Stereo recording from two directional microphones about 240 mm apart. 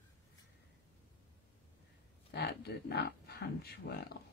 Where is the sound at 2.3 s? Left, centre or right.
Left.